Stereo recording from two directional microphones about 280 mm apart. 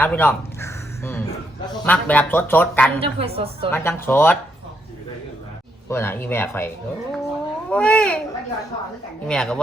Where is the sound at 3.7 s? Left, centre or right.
Centre.